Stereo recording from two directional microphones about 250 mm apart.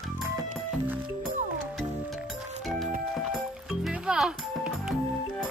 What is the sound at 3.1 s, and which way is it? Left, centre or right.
Music, centre.